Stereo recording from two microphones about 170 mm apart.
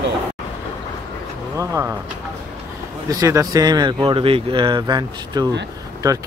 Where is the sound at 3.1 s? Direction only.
20° right (ahead or behind).